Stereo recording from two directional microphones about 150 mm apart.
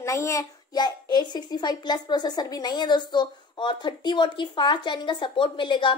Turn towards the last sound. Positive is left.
turn(degrees=30)  # may be behind; listen again after turning